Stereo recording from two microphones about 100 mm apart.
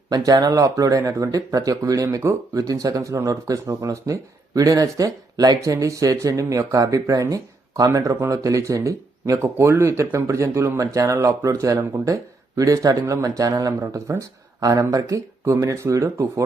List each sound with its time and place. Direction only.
0.1 s speech: 40° right (ahead or behind)